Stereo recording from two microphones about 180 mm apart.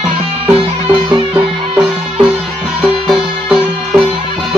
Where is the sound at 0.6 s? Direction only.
30° right (ahead or behind).